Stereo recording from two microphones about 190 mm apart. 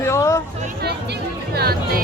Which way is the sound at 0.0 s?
15° left (ahead or behind).